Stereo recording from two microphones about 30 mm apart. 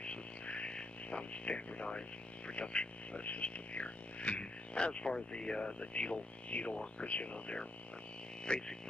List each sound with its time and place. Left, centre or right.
0.0 s a sound: left
0.7 s speech: left
4.7 s speech: left
8.5 s speech: left